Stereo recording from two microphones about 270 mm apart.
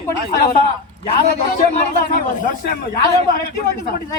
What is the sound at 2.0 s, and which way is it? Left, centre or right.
Speech, left.